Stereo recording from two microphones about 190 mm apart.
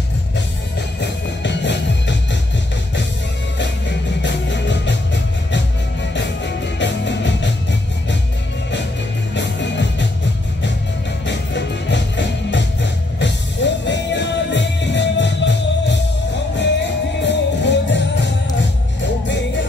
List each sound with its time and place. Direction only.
1.0 s music: 65° left (ahead or behind)
4.2 s music: 70° left (ahead or behind)
9.3 s music: 70° left (ahead or behind)
11.2 s music: 70° left (ahead or behind)
17.2 s music: 65° left (ahead or behind)